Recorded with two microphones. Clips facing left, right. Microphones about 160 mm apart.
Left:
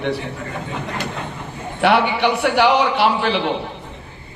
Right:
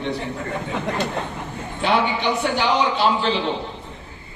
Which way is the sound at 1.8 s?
65° left (ahead or behind).